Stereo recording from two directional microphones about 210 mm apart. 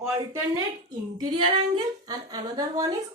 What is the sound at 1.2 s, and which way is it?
Female singing, 20° right (ahead or behind).